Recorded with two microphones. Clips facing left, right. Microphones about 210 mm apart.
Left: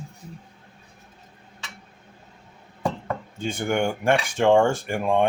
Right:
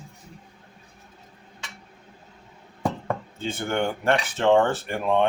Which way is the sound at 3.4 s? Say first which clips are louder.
Left 3 dB; 15° left (ahead or behind).